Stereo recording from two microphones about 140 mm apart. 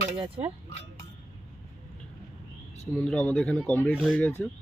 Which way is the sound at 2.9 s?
5° left (ahead or behind).